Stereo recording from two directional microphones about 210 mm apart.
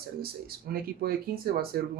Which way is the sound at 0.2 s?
45° right (ahead or behind).